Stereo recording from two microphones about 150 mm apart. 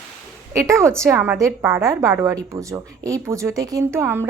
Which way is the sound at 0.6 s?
20° right (ahead or behind).